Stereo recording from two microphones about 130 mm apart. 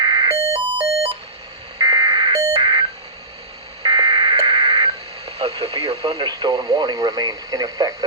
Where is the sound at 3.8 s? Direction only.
40° right (ahead or behind).